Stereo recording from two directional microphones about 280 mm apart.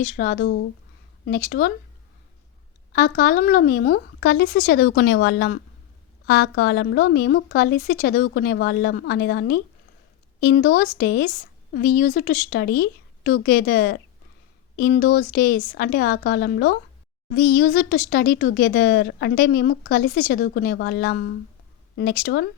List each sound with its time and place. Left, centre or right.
0.0 s speech: left
2.9 s speech: left